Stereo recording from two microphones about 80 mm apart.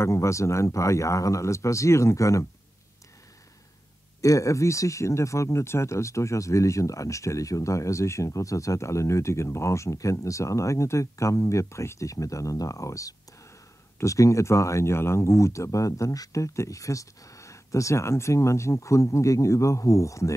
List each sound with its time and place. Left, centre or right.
0.0 s speech: left
4.2 s speech: left